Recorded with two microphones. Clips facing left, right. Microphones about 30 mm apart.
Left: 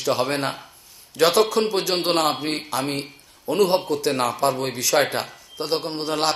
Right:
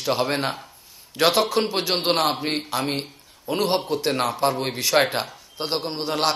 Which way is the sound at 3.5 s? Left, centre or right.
Right.